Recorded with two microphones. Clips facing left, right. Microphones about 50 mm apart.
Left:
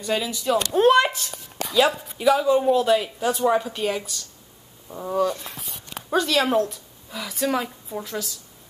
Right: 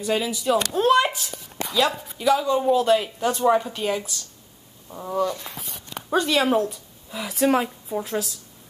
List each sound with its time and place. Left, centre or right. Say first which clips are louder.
0.0 s speech: right 1 dB; centre
4.8 s a sound: left 2 dB; centre
6.1 s speech: even; centre
6.4 s speech: even; centre
7.3 s a woman's voice: right 4 dB; right